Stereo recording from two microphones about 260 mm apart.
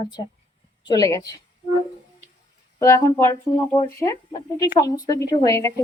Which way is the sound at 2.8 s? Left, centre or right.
Centre.